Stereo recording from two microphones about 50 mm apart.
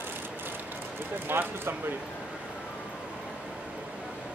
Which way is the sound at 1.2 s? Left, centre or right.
Right.